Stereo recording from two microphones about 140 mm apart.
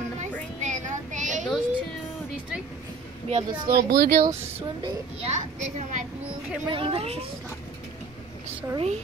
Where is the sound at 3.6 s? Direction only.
90° right.